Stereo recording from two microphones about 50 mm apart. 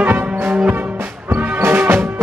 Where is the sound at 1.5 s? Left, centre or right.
Right.